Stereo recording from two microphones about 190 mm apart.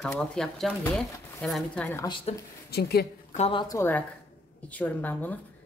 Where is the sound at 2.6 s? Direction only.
55° left (ahead or behind).